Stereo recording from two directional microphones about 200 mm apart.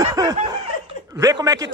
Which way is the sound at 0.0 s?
15° right (ahead or behind).